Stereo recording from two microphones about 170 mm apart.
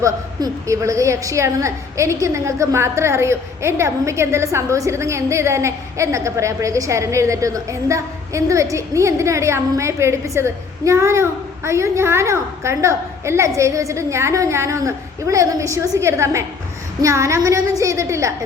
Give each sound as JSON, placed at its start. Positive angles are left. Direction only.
{"t": 0.0, "sound": "a woman's voice", "side_deg": -20}